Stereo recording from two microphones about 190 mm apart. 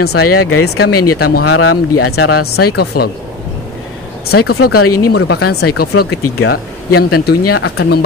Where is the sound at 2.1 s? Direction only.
55° left (ahead or behind).